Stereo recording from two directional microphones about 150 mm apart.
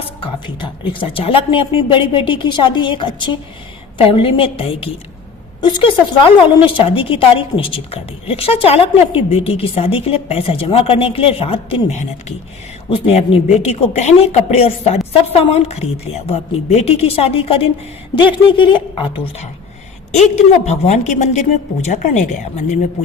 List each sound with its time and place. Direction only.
0.2 s a woman's voice: 30° left (ahead or behind)
20.1 s a woman's voice: 50° left (ahead or behind)